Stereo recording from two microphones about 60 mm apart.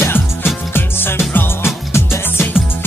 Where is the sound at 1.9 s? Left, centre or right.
Left.